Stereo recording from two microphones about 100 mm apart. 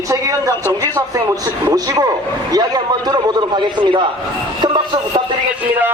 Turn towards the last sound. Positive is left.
turn(degrees=-50)  # may be behind; listen again after turning